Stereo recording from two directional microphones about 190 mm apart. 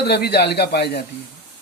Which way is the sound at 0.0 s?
55° left (ahead or behind).